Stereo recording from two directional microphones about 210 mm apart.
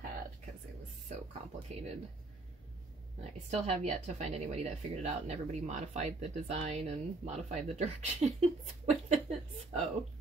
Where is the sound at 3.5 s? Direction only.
30° right (ahead or behind).